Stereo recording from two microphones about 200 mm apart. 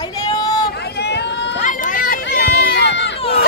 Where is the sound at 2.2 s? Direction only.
60° left (ahead or behind).